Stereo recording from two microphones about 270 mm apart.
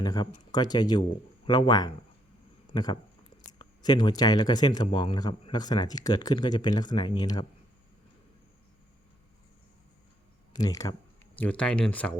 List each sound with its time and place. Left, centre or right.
0.0 s speech: centre
10.5 s speech: centre